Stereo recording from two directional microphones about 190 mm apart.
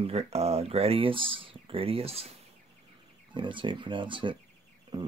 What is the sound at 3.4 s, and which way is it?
Speech, 25° right (ahead or behind).